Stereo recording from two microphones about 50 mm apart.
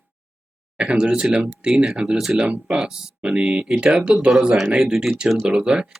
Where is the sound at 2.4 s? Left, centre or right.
Centre.